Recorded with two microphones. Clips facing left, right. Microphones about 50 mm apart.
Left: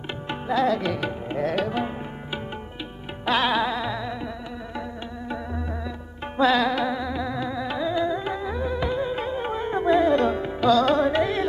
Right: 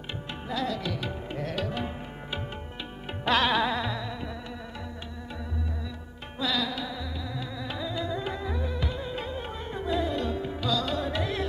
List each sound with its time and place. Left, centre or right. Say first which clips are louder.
0.3 s tabla: left 9 dB; left
3.3 s music: left 2 dB; centre
3.9 s insect: left 5 dB; centre
6.3 s music: left 10 dB; left